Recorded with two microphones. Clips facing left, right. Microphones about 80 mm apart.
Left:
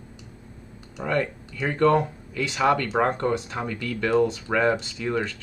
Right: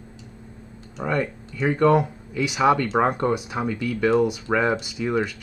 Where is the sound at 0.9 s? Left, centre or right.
Centre.